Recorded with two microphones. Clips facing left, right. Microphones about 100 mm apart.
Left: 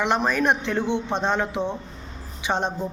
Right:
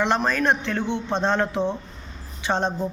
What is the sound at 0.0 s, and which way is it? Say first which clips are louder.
Speech: even; 10° left (ahead or behind).